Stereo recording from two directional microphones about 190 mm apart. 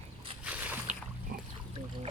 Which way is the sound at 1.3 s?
50° right (ahead or behind).